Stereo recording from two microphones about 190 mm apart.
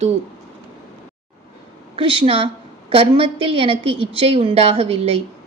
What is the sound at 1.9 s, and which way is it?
A woman's voice, 25° right (ahead or behind).